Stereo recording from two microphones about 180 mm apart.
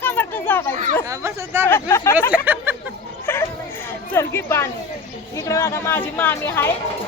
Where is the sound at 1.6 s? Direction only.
15° left (ahead or behind).